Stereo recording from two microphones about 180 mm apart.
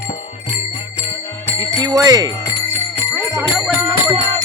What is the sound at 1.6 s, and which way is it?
Speech, 20° right (ahead or behind).